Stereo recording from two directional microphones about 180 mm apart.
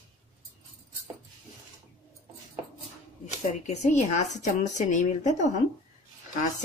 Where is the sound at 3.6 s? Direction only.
40° left (ahead or behind).